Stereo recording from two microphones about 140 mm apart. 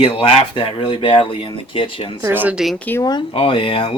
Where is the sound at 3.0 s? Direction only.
35° left (ahead or behind).